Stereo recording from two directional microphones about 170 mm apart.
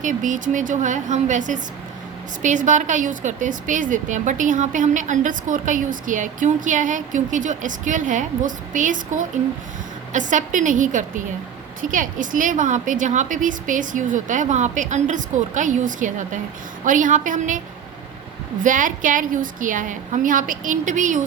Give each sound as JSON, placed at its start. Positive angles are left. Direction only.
{"t": 0.0, "sound": "a woman's voice", "side_deg": -50}
{"t": 18.6, "sound": "a woman's voice", "side_deg": -50}